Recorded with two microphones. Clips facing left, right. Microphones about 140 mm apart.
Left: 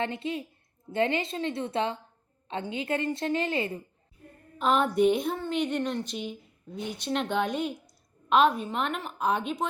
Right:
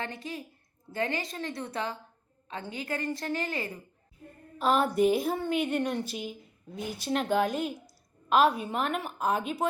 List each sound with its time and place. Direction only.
0.0 s a woman's voice: 25° left (ahead or behind)
4.5 s a woman's voice: centre (ahead or behind)